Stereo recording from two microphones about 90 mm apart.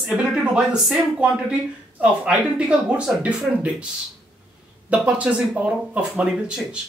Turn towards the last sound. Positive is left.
turn(degrees=-10)  # may be behind; listen again after turning